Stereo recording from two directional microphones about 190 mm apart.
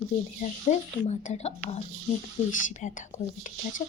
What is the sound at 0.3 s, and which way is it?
A woman's voice, 40° left (ahead or behind).